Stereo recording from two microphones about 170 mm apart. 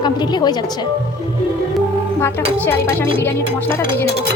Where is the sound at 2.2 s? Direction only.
10° left (ahead or behind).